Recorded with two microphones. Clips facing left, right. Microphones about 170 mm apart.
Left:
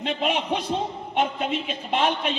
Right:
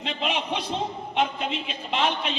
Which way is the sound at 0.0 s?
45° left (ahead or behind).